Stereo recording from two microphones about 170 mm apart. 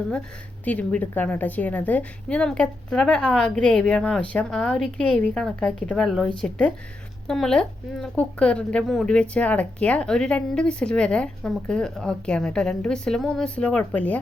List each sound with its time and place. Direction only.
0.6 s speech: 10° left (ahead or behind)